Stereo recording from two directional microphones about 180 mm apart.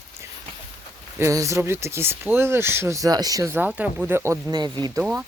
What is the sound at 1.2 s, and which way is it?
Speech, 15° right (ahead or behind).